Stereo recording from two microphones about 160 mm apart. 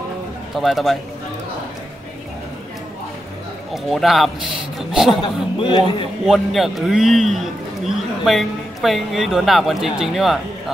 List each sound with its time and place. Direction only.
0.6 s a man's voice: centre (ahead or behind)
3.7 s a man's voice: centre (ahead or behind)
5.2 s a man's voice: 30° left (ahead or behind)
6.2 s a man's voice: centre (ahead or behind)